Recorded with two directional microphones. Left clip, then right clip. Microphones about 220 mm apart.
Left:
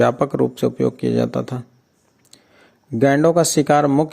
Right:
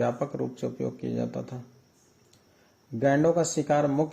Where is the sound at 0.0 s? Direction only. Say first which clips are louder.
Left 12 dB; 40° left (ahead or behind).